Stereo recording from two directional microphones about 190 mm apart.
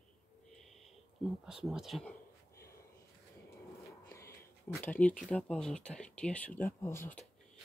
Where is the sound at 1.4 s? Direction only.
5° right (ahead or behind).